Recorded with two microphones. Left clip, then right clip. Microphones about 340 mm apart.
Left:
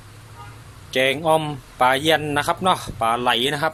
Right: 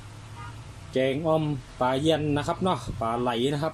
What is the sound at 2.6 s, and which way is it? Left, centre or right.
Speech, left.